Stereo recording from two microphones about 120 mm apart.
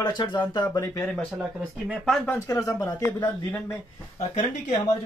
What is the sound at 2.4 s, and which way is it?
Speech, 30° left (ahead or behind).